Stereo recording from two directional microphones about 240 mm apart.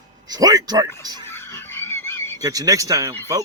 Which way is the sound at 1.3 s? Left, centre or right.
Centre.